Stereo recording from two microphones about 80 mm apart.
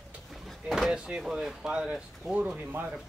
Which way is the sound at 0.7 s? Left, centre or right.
Centre.